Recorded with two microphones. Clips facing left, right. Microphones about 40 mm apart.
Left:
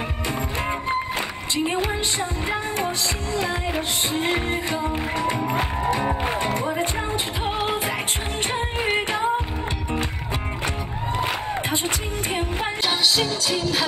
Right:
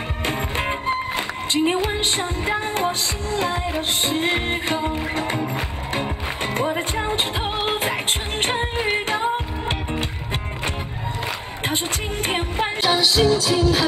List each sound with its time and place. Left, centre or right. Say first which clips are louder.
0.3 s music: right 2 dB; right
4.1 s music: even; right
6.4 s music: right 1 dB; right
12.3 s music: right 3 dB; right
12.8 s music: right 5 dB; centre